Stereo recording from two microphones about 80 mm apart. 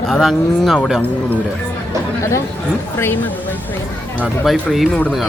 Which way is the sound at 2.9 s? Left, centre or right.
Left.